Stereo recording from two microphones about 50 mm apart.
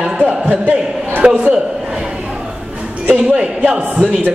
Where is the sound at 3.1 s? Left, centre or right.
Right.